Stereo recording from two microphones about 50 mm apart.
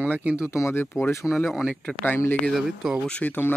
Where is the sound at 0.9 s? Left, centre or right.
Left.